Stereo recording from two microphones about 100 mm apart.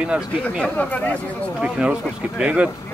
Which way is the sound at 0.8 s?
15° left (ahead or behind).